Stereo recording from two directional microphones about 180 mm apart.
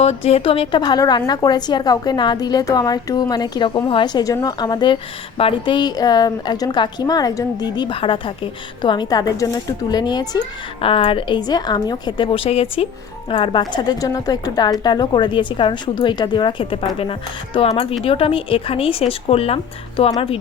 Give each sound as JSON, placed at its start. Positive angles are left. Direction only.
{"t": 0.0, "sound": "a woman's voice", "side_deg": 35}